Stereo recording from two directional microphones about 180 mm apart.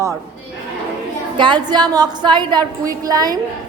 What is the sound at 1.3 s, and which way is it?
Speech, 25° right (ahead or behind).